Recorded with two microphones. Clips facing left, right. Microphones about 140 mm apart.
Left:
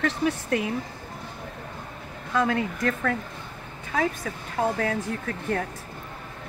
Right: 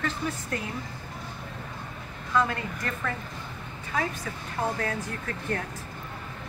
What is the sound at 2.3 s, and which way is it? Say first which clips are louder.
Speech: left 3 dB; 85° left.